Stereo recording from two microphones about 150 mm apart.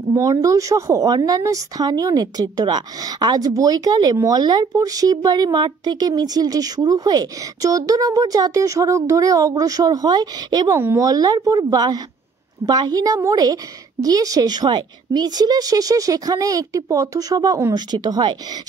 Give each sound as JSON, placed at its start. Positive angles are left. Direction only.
{"t": 0.1, "sound": "speech", "side_deg": -25}
{"t": 10.8, "sound": "speech", "side_deg": -15}
{"t": 11.1, "sound": "speech", "side_deg": -25}